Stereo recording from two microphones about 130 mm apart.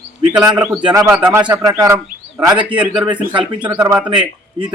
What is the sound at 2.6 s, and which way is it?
Speech, 10° right (ahead or behind).